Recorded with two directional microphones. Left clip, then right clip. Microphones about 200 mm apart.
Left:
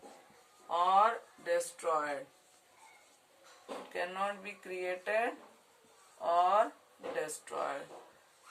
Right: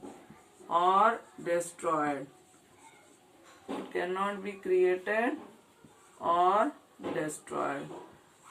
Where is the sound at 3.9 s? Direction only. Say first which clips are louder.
Right 4 dB; 25° left (ahead or behind).